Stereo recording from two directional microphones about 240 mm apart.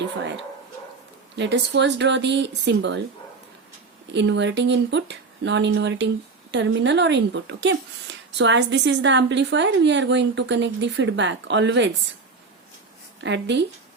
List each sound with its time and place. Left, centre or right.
1.4 s a woman's voice: right
4.1 s a woman's voice: right
13.2 s a woman's voice: right